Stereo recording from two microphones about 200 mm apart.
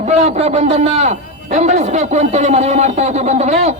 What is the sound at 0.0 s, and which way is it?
A man's voice, 35° right (ahead or behind).